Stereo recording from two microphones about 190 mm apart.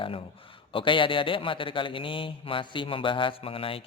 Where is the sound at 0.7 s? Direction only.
25° left (ahead or behind).